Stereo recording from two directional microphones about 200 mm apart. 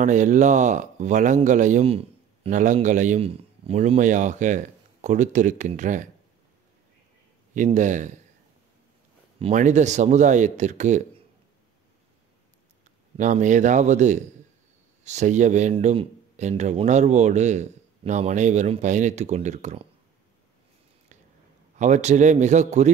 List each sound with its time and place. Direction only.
0.0 s speech: 40° right (ahead or behind)
7.5 s speech: 40° right (ahead or behind)
9.4 s speech: 35° right (ahead or behind)
13.2 s speech: 40° right (ahead or behind)
21.7 s speech: 35° right (ahead or behind)